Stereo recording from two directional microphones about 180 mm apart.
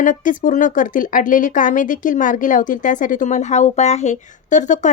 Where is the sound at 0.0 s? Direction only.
45° left (ahead or behind).